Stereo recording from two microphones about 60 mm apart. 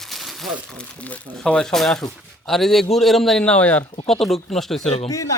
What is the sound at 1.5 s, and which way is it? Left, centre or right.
Speech, centre.